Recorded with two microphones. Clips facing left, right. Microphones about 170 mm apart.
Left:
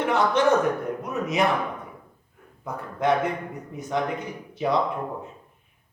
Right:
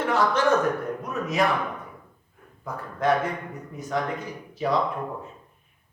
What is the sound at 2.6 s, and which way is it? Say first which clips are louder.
A man's voice: even; 20° left (ahead or behind).